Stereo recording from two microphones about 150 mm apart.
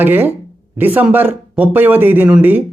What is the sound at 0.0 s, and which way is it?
Speech, 15° right (ahead or behind).